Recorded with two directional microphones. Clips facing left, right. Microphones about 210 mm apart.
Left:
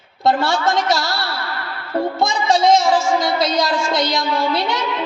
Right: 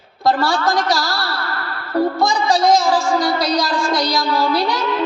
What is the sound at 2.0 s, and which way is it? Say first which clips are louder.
Music: right 2 dB; 25° left (ahead or behind).